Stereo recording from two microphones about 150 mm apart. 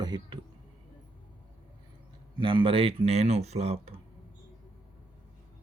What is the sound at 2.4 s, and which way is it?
Speech, 35° right (ahead or behind).